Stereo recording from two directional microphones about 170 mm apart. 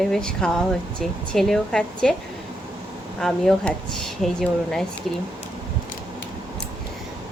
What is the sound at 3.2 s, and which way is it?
Speech, 5° left (ahead or behind).